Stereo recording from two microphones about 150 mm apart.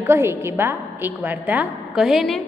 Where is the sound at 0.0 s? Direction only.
15° right (ahead or behind); by 2.4 s centre (ahead or behind).